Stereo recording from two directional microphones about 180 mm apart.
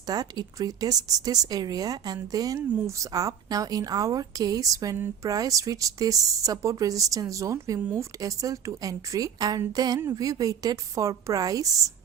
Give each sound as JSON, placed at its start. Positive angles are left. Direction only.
{"t": 0.0, "sound": "a woman's voice", "side_deg": -20}